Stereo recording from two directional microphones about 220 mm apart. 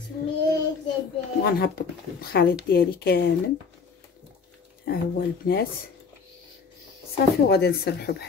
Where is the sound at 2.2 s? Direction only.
45° left (ahead or behind).